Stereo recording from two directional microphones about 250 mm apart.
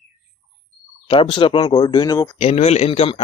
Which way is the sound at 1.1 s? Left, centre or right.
Left.